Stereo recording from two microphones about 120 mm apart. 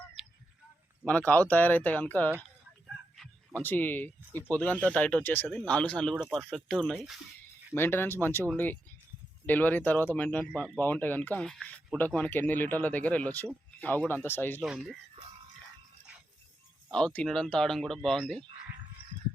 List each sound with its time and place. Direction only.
1.0 s speech: 10° left (ahead or behind)
3.2 s dog: 5° left (ahead or behind)
3.6 s speech: 15° left (ahead or behind); by 7.2 s centre (ahead or behind)
7.8 s speech: 20° left (ahead or behind)
11.4 s speech: centre (ahead or behind)
11.9 s speech: 15° left (ahead or behind)
14.6 s speech: 10° right (ahead or behind)
16.9 s speech: 10° left (ahead or behind)